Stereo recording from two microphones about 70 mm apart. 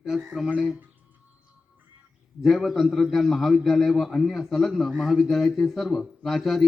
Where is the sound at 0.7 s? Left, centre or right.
Right.